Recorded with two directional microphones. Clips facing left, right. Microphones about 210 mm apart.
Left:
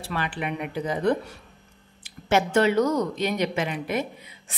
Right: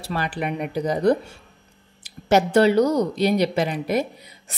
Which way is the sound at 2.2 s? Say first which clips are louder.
Right 4 dB; 35° right (ahead or behind).